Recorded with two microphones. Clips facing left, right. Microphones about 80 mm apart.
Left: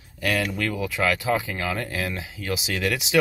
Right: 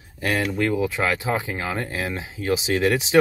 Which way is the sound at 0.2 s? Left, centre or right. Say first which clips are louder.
Right 2 dB; right.